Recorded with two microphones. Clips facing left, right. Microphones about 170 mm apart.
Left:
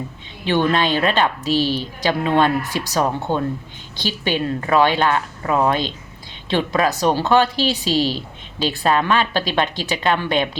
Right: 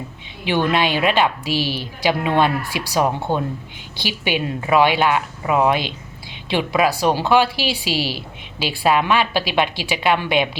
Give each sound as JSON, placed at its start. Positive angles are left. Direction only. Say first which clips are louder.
{"t": 0.4, "sound": "a woman's voice", "louder": "left 1 dB", "side_deg": -10}